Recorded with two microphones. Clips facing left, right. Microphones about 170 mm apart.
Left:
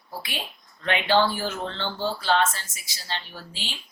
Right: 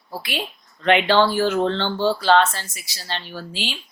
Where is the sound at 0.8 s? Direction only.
70° right (ahead or behind).